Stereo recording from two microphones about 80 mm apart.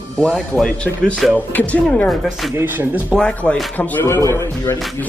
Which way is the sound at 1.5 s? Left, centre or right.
Centre.